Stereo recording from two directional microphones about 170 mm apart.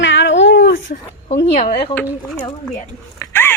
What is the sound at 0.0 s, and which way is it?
Cat, 90° left.